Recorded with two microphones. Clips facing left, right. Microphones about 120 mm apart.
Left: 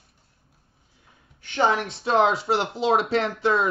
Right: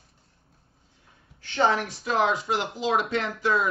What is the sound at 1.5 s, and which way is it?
Speech, 20° left (ahead or behind).